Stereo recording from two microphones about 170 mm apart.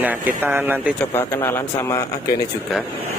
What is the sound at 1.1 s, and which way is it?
Speech, 15° left (ahead or behind).